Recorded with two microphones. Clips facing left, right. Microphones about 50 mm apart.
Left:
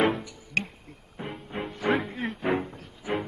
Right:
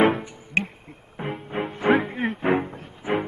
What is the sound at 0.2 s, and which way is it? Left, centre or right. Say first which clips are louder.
Music: right 4 dB; right.